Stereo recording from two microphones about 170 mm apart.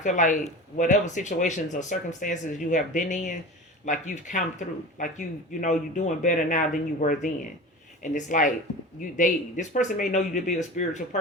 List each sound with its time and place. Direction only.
0.0 s speech: 45° left (ahead or behind)